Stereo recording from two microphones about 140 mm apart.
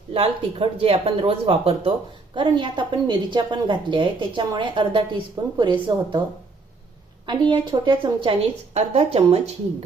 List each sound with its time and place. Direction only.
0.1 s speech: 40° right (ahead or behind)
7.3 s speech: 35° right (ahead or behind)